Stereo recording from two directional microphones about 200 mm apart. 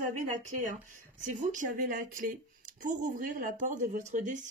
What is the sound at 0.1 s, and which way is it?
Speech, 40° right (ahead or behind).